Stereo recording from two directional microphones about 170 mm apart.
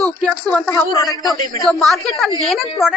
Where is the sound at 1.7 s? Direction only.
Centre (ahead or behind).